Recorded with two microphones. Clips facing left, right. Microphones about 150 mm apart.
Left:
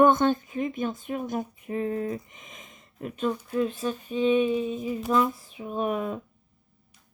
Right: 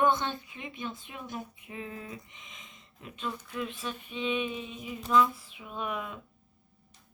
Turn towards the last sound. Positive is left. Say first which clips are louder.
# left 8 dB
turn(degrees=40)  # may be behind; listen again after turning